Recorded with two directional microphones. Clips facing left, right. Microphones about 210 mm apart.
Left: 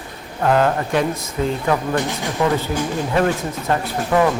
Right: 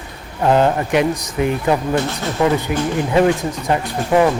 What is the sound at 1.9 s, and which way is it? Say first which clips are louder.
Speech: right 2 dB; 15° left (ahead or behind).